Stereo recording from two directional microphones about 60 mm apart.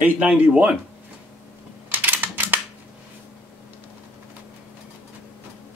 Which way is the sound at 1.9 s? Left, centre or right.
Right.